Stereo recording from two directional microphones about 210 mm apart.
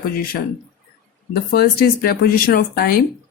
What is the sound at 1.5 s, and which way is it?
Speech, 45° left (ahead or behind).